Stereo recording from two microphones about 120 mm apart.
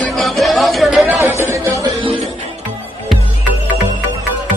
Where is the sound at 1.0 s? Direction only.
20° right (ahead or behind).